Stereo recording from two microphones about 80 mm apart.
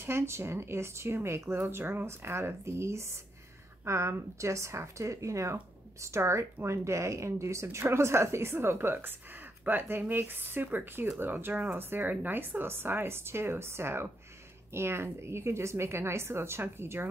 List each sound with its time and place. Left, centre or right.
0.0 s a woman's voice: right